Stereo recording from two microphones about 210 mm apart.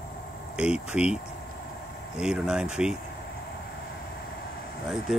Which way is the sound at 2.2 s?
5° right (ahead or behind).